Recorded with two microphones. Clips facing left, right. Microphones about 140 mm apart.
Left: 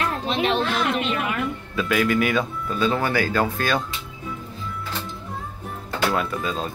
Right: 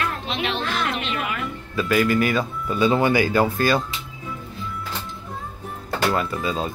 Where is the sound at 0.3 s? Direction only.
45° left (ahead or behind).